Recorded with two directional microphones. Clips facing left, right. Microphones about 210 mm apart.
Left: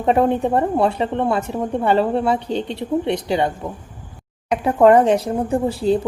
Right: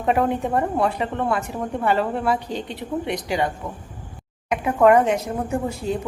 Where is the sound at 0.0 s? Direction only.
30° left (ahead or behind).